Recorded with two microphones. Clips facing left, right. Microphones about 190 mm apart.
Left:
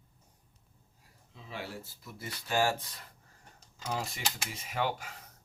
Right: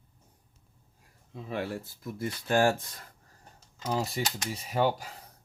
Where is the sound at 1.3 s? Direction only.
55° right (ahead or behind).